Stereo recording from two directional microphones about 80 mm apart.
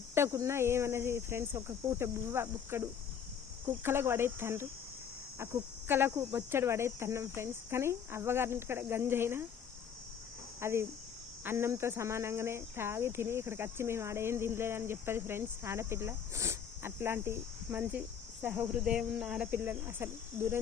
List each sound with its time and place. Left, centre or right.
0.1 s speech: right
10.6 s speech: right
18.4 s cricket: right
18.7 s speech: centre
19.5 s cricket: right